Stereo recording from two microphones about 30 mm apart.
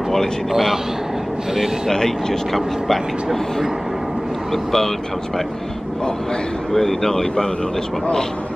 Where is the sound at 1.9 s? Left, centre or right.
Centre.